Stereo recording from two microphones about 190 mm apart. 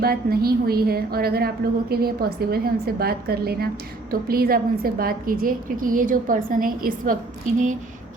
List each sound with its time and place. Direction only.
0.0 s a woman's voice: 50° right (ahead or behind)